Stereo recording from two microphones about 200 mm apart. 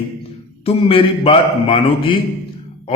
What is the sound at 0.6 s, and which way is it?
A man's voice, 30° left (ahead or behind).